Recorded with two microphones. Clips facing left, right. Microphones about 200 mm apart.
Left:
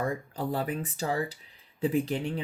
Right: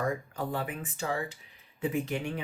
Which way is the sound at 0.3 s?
35° left (ahead or behind).